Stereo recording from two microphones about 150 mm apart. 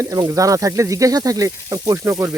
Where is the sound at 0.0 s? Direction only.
20° right (ahead or behind).